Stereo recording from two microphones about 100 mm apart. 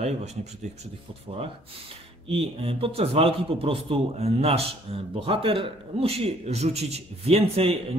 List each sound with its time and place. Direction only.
0.0 s speech: 90° right
2.2 s a man's voice: 70° right (ahead or behind)